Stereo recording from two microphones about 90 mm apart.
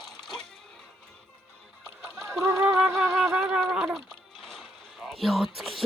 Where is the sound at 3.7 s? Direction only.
15° right (ahead or behind).